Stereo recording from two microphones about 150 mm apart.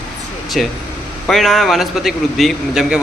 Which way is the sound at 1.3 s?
Centre (ahead or behind).